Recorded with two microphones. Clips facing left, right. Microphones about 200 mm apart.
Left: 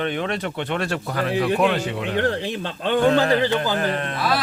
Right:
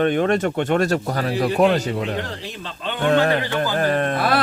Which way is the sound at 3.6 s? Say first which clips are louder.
Right 3 dB; 45° right (ahead or behind).